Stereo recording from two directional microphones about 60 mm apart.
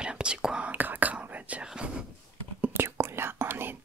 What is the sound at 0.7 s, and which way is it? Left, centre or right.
Whispering, right.